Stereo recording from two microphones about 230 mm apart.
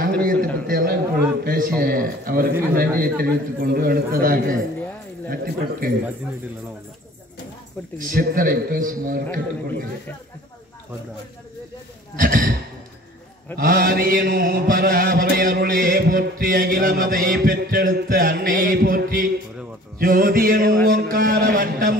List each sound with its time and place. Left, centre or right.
0.2 s a sound: right
5.3 s a man's voice: right
8.0 s mantra: right
12.2 s mantra: right
13.6 s mantra: right